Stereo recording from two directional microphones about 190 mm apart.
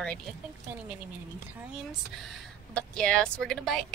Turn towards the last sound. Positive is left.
turn(degrees=0)  # may be behind; listen again after turning